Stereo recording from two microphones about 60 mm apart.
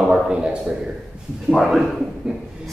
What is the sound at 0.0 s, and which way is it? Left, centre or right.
Speech, centre.